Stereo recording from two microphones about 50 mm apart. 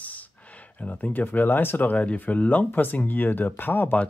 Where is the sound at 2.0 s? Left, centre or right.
Left.